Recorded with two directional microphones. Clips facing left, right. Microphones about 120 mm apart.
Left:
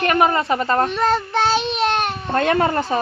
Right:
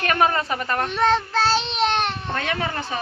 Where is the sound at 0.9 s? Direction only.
5° left (ahead or behind).